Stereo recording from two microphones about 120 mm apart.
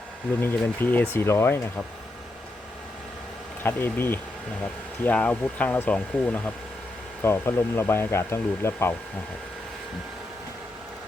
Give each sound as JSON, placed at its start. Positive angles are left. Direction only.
{"t": 0.4, "sound": "speech", "side_deg": 15}
{"t": 3.6, "sound": "speech", "side_deg": 20}